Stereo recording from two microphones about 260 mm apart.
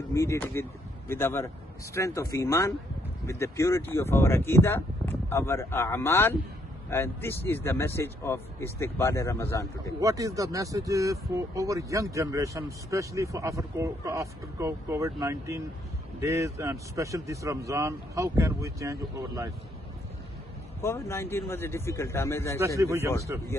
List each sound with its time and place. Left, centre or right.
0.1 s speech: centre
9.9 s speech: centre
20.8 s speech: centre
22.8 s speech: centre